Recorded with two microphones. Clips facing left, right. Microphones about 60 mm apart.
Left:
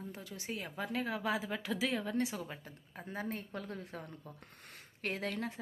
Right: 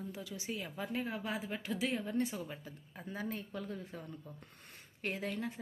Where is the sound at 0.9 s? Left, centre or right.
Left.